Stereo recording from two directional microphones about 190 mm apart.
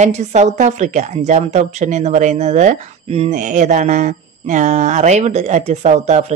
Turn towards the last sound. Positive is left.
turn(degrees=-35)  # may be behind; listen again after turning